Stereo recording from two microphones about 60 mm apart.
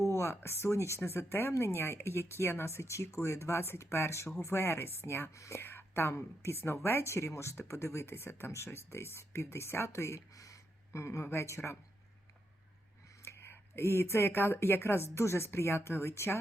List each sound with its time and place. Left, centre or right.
0.0 s speech: left
5.3 s speech: left
5.5 s speech: left
10.2 s speech: left
13.2 s speech: left